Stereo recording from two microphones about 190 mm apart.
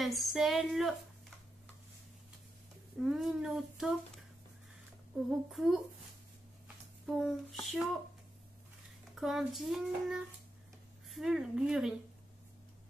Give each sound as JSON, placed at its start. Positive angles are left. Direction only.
{"t": 0.0, "sound": "speech", "side_deg": 0}
{"t": 3.0, "sound": "speech", "side_deg": 0}
{"t": 5.1, "sound": "speech", "side_deg": 0}
{"t": 7.1, "sound": "speech", "side_deg": 0}
{"t": 9.1, "sound": "speech", "side_deg": 0}